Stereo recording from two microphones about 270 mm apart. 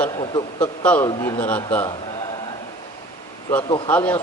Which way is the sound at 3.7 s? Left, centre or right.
Centre.